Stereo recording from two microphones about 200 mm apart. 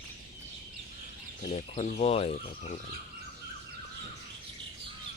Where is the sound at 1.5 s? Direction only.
35° left (ahead or behind).